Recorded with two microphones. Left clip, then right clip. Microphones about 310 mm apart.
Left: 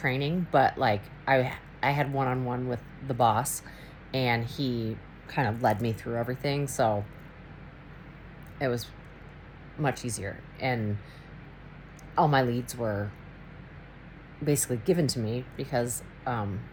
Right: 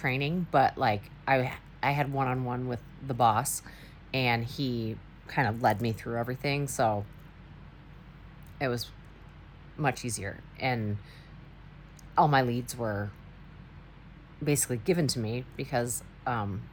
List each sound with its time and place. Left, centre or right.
0.2 s speech: centre
2.6 s speech: centre
8.6 s speech: centre
10.6 s speech: centre
12.1 s speech: centre
12.8 s speech: centre
14.4 s speech: centre